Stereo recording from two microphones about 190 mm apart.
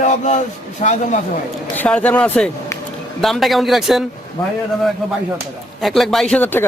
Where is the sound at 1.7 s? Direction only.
10° left (ahead or behind).